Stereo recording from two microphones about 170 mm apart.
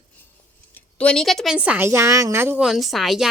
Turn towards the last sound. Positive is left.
turn(degrees=0)  # may be behind; listen again after turning